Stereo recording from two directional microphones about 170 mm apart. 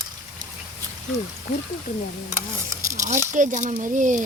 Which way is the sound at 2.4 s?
20° right (ahead or behind).